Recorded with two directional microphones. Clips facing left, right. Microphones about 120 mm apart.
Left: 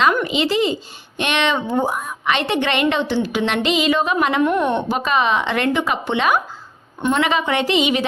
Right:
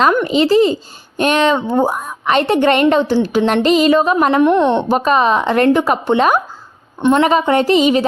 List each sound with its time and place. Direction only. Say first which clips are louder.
0.3 s speech: right 7 dB; 40° right (ahead or behind)
4.4 s a woman's voice: right 6 dB; 25° right (ahead or behind)
4.9 s speech: right 5 dB; 40° right (ahead or behind)